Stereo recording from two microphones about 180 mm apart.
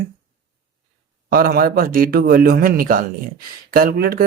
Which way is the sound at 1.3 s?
55° right (ahead or behind).